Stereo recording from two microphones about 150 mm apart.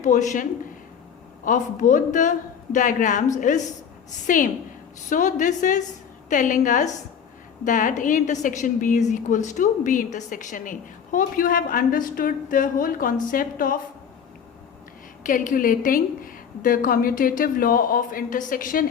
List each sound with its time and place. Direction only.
0.0 s a woman's voice: 55° left (ahead or behind)
1.5 s a woman's voice: 60° left (ahead or behind)
15.3 s a woman's voice: 65° left (ahead or behind)